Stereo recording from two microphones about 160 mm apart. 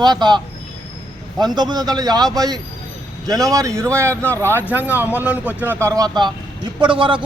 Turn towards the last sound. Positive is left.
turn(degrees=-30)  # may be behind; listen again after turning